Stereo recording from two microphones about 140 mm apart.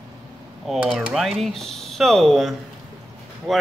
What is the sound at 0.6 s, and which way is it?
Speech, 5° right (ahead or behind).